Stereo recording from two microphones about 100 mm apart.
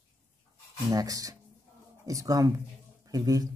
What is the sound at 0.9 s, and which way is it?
Speech, 35° right (ahead or behind).